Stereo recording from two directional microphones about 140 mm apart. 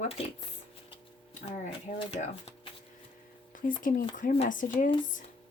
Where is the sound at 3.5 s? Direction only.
75° left (ahead or behind).